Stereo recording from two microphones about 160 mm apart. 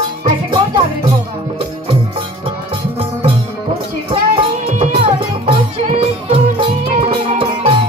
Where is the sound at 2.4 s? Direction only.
35° right (ahead or behind).